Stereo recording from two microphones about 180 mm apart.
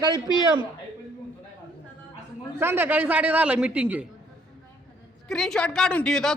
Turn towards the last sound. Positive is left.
turn(degrees=5)  # may be behind; listen again after turning